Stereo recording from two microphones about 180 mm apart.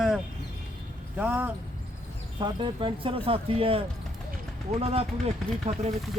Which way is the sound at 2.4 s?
25° right (ahead or behind).